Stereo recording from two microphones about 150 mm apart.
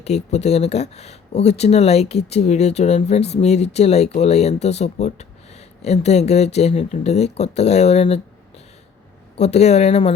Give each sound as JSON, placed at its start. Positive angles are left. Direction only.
{"t": 0.0, "sound": "speech", "side_deg": 45}
{"t": 9.4, "sound": "speech", "side_deg": 45}